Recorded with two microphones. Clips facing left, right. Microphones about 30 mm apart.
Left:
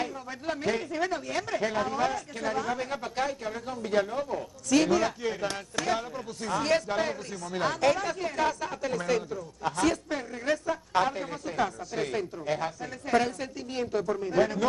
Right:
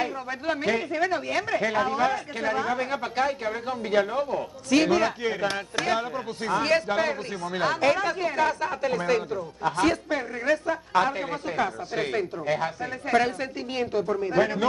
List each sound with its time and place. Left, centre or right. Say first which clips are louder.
0.0 s speech: right 5 dB; right